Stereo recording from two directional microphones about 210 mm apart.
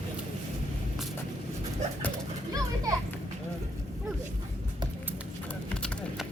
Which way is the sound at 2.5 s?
15° right (ahead or behind).